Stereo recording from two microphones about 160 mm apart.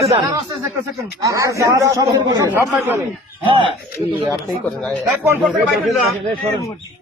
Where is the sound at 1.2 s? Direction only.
20° right (ahead or behind).